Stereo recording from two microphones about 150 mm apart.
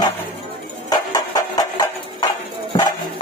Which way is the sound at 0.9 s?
25° left (ahead or behind).